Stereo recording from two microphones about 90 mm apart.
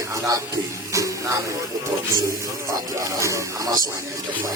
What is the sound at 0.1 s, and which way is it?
Speech, 40° right (ahead or behind).